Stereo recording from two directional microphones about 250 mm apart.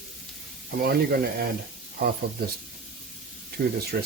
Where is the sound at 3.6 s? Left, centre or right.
Right.